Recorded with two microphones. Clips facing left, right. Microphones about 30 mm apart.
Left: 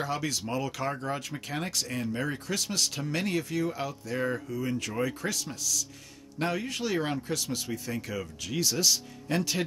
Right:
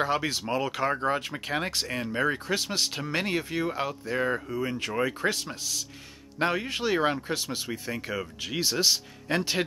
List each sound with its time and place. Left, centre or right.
0.0 s speech: right